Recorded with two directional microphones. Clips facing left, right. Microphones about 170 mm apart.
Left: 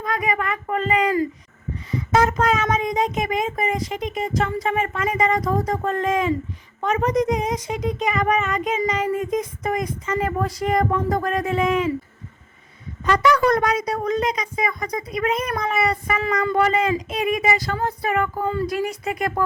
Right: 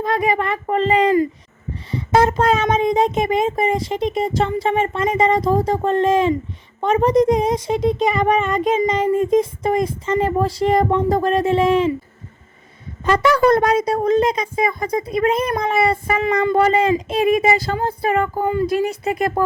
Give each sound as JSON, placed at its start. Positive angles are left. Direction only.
{"t": 0.0, "sound": "speech", "side_deg": -30}
{"t": 13.1, "sound": "speech", "side_deg": -30}